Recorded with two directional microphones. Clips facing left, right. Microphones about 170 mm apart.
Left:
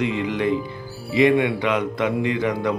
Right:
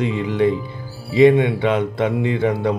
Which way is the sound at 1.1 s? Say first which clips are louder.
Right 4 dB; 25° right (ahead or behind).